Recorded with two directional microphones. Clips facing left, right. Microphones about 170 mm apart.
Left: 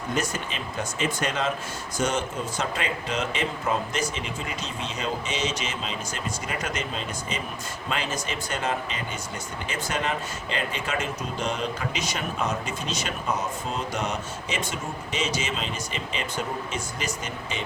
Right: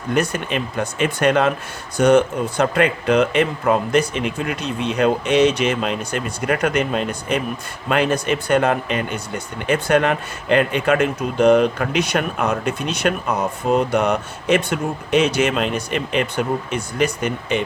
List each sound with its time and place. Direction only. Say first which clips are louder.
0.1 s speech: right 9 dB; 60° right (ahead or behind)